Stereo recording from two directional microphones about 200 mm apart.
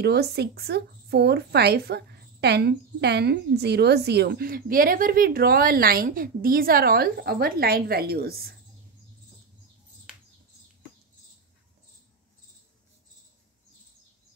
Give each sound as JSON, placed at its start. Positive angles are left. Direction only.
{"t": 0.0, "sound": "a woman's voice", "side_deg": -55}